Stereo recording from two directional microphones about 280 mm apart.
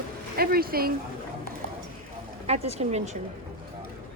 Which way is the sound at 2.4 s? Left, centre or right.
Right.